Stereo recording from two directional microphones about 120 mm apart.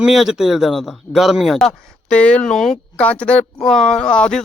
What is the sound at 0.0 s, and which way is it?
Speech, 5° right (ahead or behind).